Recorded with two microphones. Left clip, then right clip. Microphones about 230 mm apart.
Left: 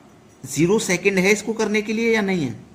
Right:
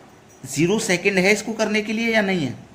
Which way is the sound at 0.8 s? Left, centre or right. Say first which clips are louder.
Even; centre.